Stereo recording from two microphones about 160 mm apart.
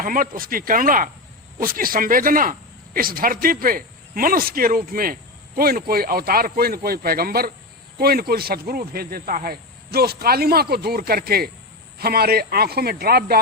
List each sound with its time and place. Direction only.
0.0 s speech: 60° right (ahead or behind); by 13.4 s 75° right (ahead or behind)